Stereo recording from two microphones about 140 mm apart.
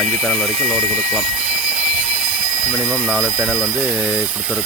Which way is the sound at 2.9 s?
5° right (ahead or behind).